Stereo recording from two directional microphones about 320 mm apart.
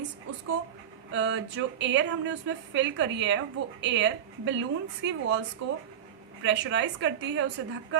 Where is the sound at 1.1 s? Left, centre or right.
Right.